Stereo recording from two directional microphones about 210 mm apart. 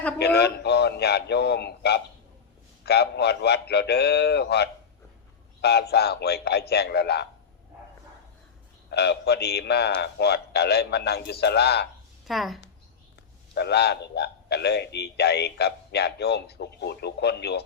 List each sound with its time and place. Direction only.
0.2 s a man's voice: 50° left (ahead or behind)
8.9 s a man's voice: 50° left (ahead or behind)
12.3 s a woman's voice: centre (ahead or behind)
13.5 s a man's voice: 50° left (ahead or behind)